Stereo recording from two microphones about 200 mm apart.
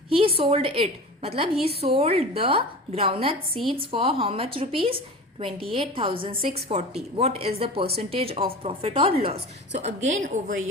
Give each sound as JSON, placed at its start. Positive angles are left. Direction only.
{"t": 0.1, "sound": "a woman's voice", "side_deg": -30}